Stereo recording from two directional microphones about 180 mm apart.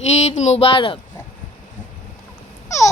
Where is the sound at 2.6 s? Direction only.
15° left (ahead or behind).